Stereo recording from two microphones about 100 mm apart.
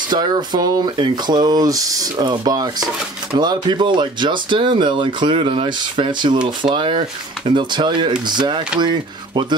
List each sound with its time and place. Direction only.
0.1 s speech: 45° right (ahead or behind)